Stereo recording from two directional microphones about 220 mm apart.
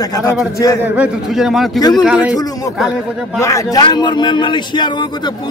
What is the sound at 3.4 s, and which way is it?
A man's voice, 15° left (ahead or behind).